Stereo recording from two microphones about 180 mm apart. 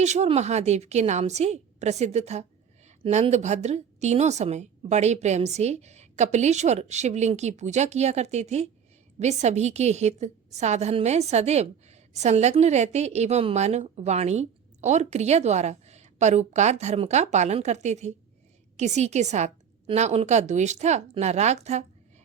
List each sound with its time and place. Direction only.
0.0 s a woman's voice: 40° right (ahead or behind)